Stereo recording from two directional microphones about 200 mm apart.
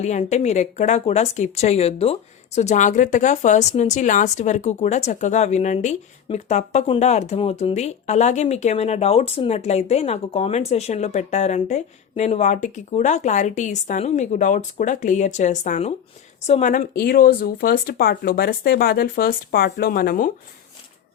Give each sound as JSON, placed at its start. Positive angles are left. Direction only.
{"t": 0.0, "sound": "speech", "side_deg": 35}